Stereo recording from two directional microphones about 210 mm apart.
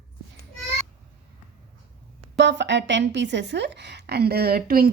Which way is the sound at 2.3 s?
55° right (ahead or behind).